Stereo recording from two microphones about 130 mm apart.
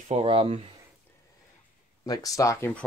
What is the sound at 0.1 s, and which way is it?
Speech, 50° right (ahead or behind).